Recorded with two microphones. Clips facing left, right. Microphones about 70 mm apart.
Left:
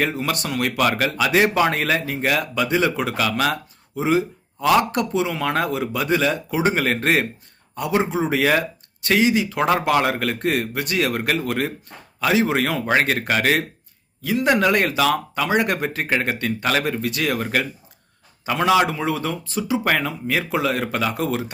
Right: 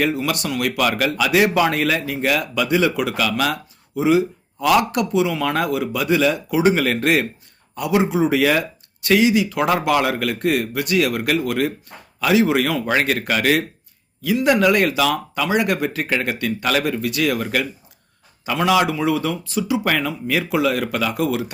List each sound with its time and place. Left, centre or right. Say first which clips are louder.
0.0 s speech: right 2 dB; left